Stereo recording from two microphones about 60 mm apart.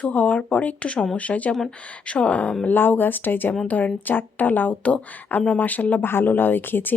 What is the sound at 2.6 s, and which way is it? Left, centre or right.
Speech, left.